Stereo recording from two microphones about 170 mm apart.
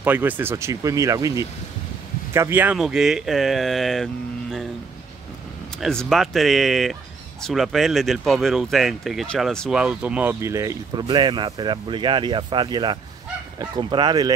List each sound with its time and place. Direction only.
0.0 s speech: 10° right (ahead or behind)
5.8 s speech: 5° left (ahead or behind); by 14.3 s 25° right (ahead or behind)